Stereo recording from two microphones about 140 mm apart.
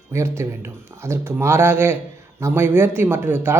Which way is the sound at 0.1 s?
20° right (ahead or behind).